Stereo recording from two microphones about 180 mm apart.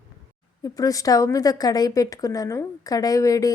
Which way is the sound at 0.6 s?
20° left (ahead or behind).